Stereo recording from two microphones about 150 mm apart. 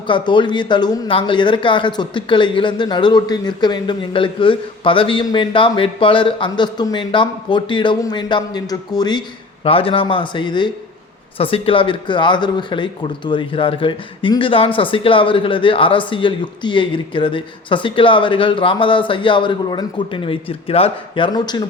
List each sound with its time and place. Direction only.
0.1 s speech: 30° left (ahead or behind)
9.6 s speech: 40° left (ahead or behind)
21.3 s speech: 30° left (ahead or behind)